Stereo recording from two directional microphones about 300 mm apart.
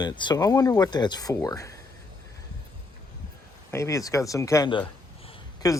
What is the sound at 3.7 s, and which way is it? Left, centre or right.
Speech, centre.